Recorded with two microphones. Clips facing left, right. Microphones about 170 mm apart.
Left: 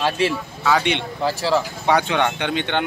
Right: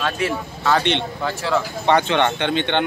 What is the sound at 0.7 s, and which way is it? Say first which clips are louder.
Speech: right 1 dB; 10° left (ahead or behind).